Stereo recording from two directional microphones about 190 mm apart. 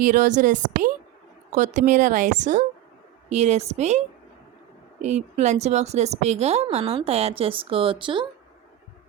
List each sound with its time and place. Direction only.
0.0 s a woman's voice: 45° right (ahead or behind)
5.0 s a woman's voice: 35° right (ahead or behind)